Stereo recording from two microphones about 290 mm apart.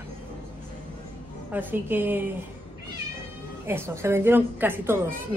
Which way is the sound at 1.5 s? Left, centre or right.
Centre.